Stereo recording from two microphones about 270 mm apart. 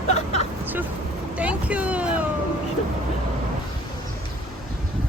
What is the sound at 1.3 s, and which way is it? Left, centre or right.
Speech, centre.